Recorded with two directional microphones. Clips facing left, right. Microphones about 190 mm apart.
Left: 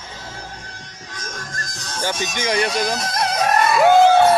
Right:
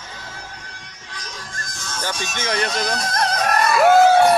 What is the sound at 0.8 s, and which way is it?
Music, 45° left (ahead or behind).